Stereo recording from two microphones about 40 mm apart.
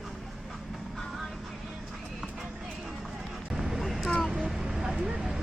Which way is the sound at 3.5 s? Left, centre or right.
Centre.